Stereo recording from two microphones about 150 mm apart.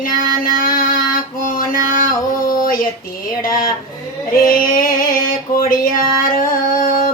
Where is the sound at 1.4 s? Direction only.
65° left (ahead or behind).